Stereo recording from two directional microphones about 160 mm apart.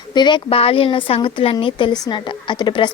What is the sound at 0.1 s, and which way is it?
A woman's voice, 30° left (ahead or behind).